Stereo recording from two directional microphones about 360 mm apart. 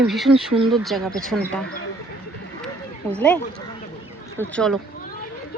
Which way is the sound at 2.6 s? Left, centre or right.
Centre.